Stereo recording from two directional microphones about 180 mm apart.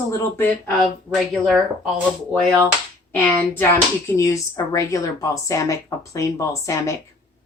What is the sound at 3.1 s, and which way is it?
Speech, 10° left (ahead or behind).